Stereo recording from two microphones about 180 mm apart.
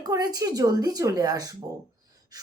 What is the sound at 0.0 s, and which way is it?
A woman's voice, 20° right (ahead or behind).